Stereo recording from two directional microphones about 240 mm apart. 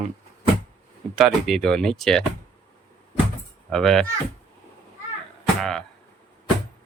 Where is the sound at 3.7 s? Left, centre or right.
Centre.